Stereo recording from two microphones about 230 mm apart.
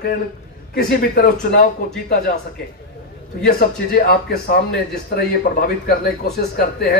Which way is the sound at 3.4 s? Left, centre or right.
Left.